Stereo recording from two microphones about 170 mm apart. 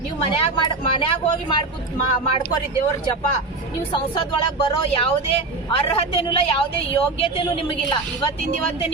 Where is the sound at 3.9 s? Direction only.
30° left (ahead or behind).